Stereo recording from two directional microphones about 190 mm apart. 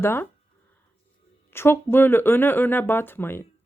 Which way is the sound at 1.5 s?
10° left (ahead or behind).